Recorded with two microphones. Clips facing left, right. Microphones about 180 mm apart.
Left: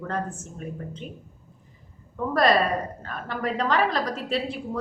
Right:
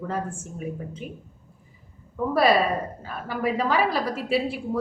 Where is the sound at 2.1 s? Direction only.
5° right (ahead or behind).